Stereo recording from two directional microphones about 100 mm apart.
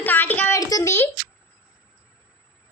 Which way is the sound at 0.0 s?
20° left (ahead or behind).